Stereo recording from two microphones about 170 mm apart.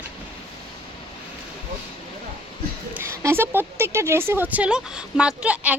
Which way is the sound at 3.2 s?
15° right (ahead or behind).